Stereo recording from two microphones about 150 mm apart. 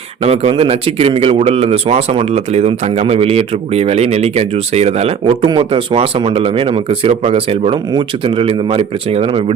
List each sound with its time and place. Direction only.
0.2 s speech: 40° right (ahead or behind)